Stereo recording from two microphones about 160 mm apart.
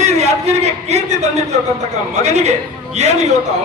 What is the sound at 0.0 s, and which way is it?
A man's voice, 45° right (ahead or behind).